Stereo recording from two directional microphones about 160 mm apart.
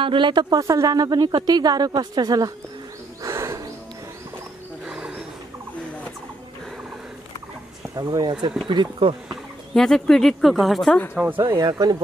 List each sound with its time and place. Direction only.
0.0 s speech: 30° right (ahead or behind)
3.2 s wild animals: 15° right (ahead or behind)
4.8 s wild animals: 5° right (ahead or behind)
7.9 s speech: 25° right (ahead or behind)
9.3 s speech: centre (ahead or behind)
11.4 s speech: 25° right (ahead or behind)